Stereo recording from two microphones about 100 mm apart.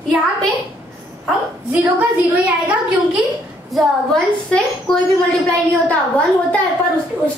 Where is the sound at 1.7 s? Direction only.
15° right (ahead or behind).